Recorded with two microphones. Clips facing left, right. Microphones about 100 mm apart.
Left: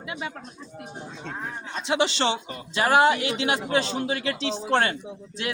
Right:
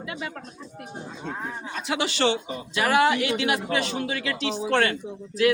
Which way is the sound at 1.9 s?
25° left (ahead or behind).